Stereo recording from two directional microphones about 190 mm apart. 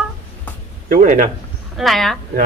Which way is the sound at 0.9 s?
45° right (ahead or behind).